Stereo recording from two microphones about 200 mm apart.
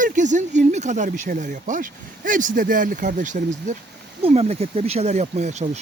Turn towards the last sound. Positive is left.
turn(degrees=-35)  # may be behind; listen again after turning